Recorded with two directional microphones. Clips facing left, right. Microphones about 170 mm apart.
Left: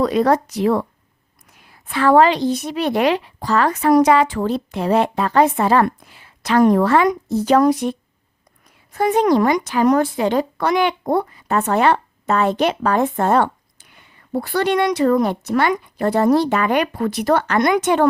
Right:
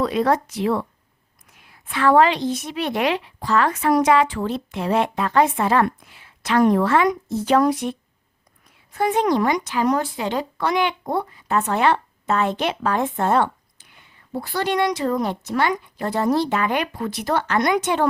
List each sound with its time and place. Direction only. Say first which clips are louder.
0.0 s a woman's voice: left 4 dB; 40° left (ahead or behind)
1.9 s a woman's voice: left 3 dB; 35° left (ahead or behind)
14.3 s speech: left 4 dB; 60° left (ahead or behind)